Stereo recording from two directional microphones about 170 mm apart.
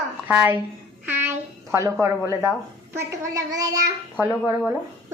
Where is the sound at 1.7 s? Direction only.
15° right (ahead or behind).